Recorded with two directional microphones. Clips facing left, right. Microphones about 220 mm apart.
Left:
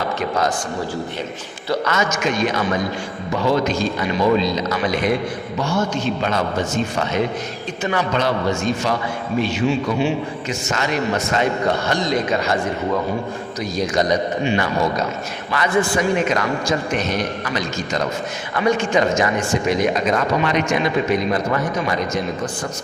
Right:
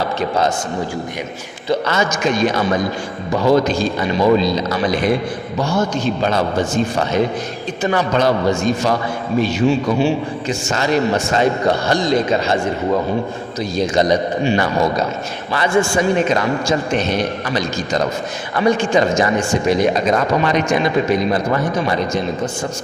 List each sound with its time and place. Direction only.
0.2 s a man's voice: 25° right (ahead or behind)
1.7 s a man's voice: 30° right (ahead or behind)